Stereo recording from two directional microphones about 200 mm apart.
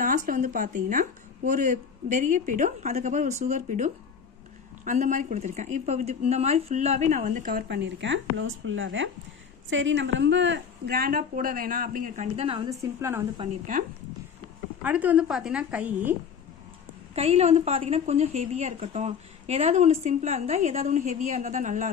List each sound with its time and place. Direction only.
0.0 s a woman's voice: 40° right (ahead or behind)
12.6 s a woman's voice: 15° right (ahead or behind)
14.8 s a woman's voice: 10° right (ahead or behind)
17.1 s a woman's voice: 30° right (ahead or behind)